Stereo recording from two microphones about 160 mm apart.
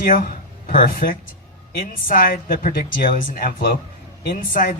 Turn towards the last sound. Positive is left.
turn(degrees=65)  # may be behind; listen again after turning